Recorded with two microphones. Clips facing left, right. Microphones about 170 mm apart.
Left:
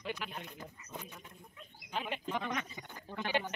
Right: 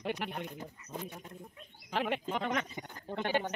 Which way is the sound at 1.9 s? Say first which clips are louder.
Right 6 dB; 80° right.